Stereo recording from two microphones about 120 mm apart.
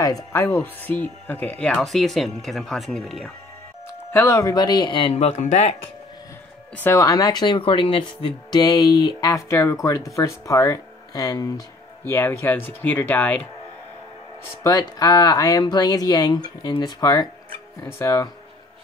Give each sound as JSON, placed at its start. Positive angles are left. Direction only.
{"t": 0.0, "sound": "speech", "side_deg": 25}
{"t": 4.1, "sound": "speech", "side_deg": 25}
{"t": 5.1, "sound": "speech", "side_deg": 70}
{"t": 6.8, "sound": "speech", "side_deg": 25}
{"t": 12.0, "sound": "speech", "side_deg": 20}
{"t": 14.4, "sound": "speech", "side_deg": 30}